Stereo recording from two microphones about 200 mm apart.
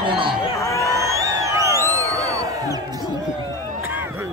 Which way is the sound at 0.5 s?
15° left (ahead or behind).